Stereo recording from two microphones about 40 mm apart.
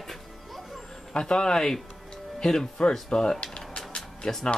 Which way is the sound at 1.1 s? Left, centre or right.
Left.